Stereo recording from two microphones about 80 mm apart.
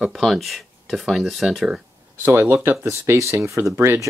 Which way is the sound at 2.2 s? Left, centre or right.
Right.